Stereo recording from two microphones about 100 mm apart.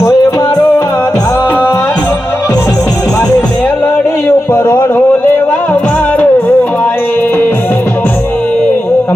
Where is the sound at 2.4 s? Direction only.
35° left (ahead or behind).